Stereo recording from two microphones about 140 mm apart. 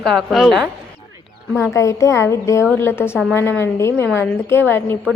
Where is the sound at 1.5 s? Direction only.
20° left (ahead or behind).